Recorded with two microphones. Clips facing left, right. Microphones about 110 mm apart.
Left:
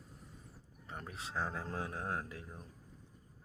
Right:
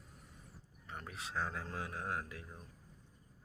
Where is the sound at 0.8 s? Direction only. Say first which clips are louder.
Left 1 dB; 35° left (ahead or behind).